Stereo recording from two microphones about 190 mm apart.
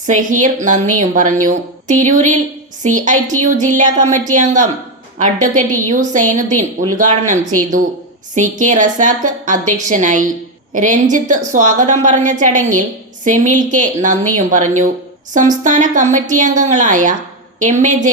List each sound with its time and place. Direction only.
0.0 s a woman's voice: 40° right (ahead or behind)